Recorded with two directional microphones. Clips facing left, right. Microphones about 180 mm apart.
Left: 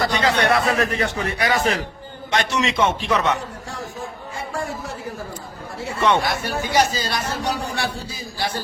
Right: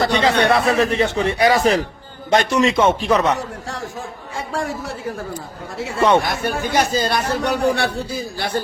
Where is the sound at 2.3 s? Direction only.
45° right (ahead or behind).